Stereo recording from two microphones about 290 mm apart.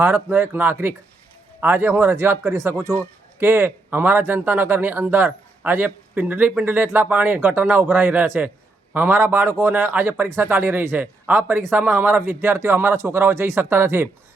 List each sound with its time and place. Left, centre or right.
0.0 s a man's voice: centre